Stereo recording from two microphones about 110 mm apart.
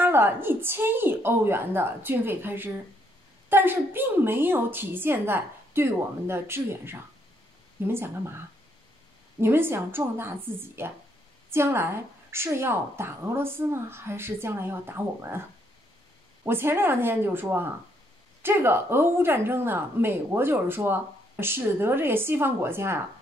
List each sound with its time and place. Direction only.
0.0 s a woman's voice: 20° right (ahead or behind)
9.4 s a woman's voice: 20° right (ahead or behind)
16.4 s a woman's voice: 20° right (ahead or behind)